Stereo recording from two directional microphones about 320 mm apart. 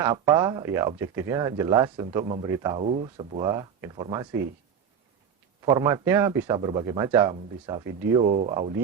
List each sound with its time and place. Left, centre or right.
0.0 s speech: centre
5.6 s speech: centre
8.5 s speech: centre